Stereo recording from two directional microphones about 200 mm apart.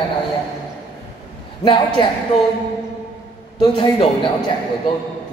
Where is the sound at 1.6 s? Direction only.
25° left (ahead or behind).